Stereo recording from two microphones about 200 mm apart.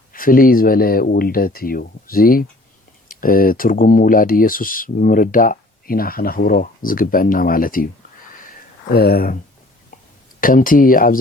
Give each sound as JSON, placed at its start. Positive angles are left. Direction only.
{"t": 0.1, "sound": "speech", "side_deg": 45}
{"t": 8.9, "sound": "speech", "side_deg": 50}
{"t": 10.4, "sound": "speech", "side_deg": 45}